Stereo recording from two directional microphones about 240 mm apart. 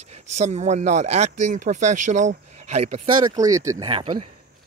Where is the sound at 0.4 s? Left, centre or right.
Right.